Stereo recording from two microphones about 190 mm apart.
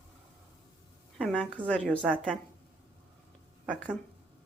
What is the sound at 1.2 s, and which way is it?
Speech, 5° left (ahead or behind).